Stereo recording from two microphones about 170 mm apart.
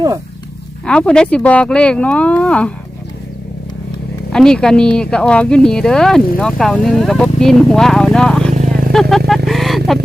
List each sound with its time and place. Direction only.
0.9 s speech: 5° left (ahead or behind)
4.3 s speech: 5° left (ahead or behind)
8.5 s vehicle: 40° right (ahead or behind)
8.9 s vehicle: centre (ahead or behind)